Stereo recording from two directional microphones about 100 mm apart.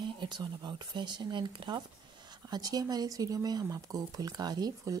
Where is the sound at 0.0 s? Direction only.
55° right (ahead or behind).